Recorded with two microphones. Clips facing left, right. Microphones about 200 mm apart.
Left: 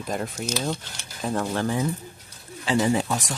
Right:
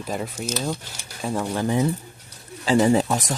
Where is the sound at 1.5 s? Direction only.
20° right (ahead or behind).